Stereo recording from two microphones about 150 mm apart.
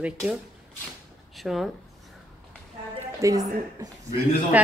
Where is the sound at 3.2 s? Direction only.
20° right (ahead or behind).